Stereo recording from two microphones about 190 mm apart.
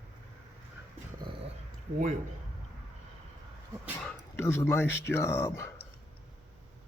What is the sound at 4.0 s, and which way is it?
Speech, 10° left (ahead or behind).